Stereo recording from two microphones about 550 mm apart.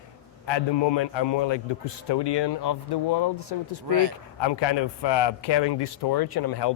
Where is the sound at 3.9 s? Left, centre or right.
Right.